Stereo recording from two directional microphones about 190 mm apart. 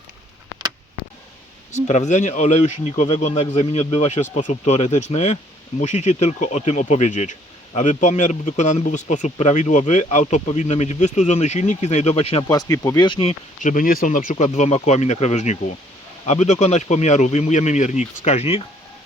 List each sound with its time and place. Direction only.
1.7 s speech: 40° left (ahead or behind)
12.5 s speech: 15° left (ahead or behind)
13.1 s speech: 30° left (ahead or behind)
13.6 s speech: 45° left (ahead or behind)